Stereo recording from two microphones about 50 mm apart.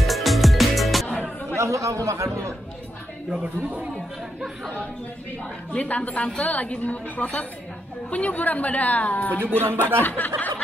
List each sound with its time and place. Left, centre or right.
0.0 s music: centre
1.6 s a man's voice: right
3.3 s speech: right
5.8 s a woman's voice: left
9.6 s speech: right
10.0 s a woman's voice: left